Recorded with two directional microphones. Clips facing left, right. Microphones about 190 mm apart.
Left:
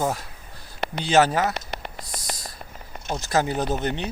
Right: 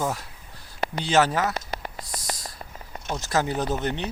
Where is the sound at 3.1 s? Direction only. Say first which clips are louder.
Left 2 dB; 15° left (ahead or behind).